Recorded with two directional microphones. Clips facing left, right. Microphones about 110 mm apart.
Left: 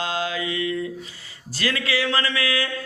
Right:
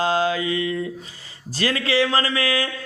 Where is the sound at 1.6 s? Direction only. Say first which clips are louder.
Right 4 dB; 35° right (ahead or behind).